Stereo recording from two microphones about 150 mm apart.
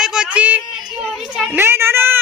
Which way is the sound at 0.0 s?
5° right (ahead or behind).